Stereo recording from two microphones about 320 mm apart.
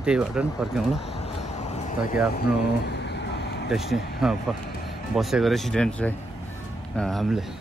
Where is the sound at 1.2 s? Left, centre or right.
Left.